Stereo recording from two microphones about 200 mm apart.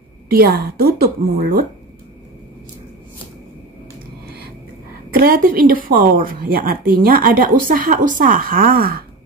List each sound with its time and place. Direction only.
0.3 s speech: 50° right (ahead or behind)
5.1 s speech: 45° right (ahead or behind)